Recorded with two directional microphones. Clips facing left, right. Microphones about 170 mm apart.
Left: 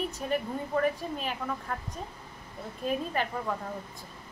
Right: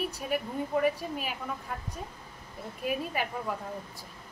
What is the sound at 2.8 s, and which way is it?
Speech, 10° right (ahead or behind).